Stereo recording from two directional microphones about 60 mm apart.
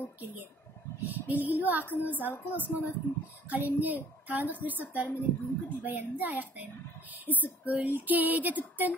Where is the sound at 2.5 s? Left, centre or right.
Right.